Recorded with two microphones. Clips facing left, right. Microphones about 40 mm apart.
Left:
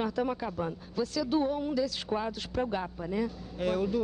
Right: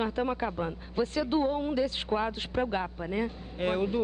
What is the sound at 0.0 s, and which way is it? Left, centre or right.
Speech, right.